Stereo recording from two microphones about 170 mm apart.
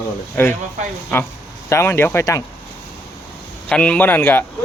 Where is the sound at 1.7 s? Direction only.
15° left (ahead or behind).